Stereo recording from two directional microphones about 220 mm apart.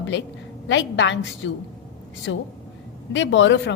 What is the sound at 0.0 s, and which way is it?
A woman's voice, 55° left (ahead or behind).